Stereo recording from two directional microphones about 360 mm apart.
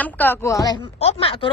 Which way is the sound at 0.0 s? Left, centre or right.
Centre.